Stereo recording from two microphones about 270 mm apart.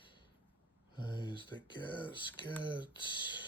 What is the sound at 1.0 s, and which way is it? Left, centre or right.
Speech, centre.